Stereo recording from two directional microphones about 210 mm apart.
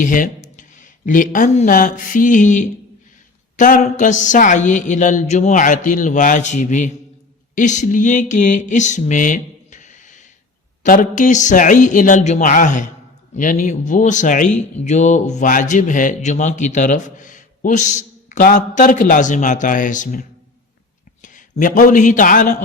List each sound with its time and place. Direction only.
0.0 s speech: 40° left (ahead or behind)
7.5 s a sound: 35° left (ahead or behind)
10.8 s a man's voice: 40° left (ahead or behind)